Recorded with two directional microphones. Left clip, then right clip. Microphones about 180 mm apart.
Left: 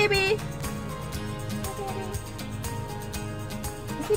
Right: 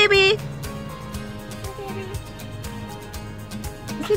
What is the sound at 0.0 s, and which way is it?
Music, 35° right (ahead or behind).